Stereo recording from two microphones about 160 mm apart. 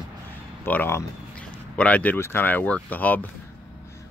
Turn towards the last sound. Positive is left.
turn(degrees=10)  # may be behind; listen again after turning